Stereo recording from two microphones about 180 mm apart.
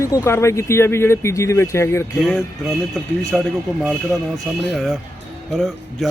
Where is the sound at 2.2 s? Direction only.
Centre (ahead or behind).